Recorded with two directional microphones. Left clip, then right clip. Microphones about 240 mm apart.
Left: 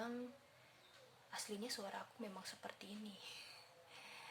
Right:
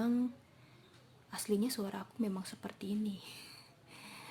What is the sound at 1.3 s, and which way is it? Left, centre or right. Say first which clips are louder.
Speech: right 11 dB; right.